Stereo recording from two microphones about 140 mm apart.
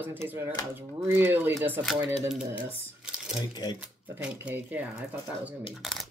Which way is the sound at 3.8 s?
5° right (ahead or behind).